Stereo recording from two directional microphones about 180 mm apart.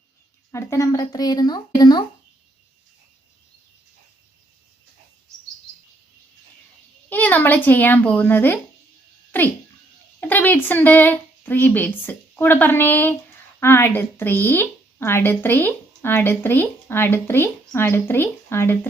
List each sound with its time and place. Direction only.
0.5 s speech: 15° left (ahead or behind)
7.1 s a woman's voice: 10° left (ahead or behind)